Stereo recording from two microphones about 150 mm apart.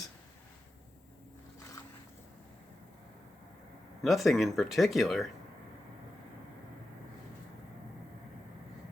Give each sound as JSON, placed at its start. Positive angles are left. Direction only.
{"t": 4.0, "sound": "speech", "side_deg": 0}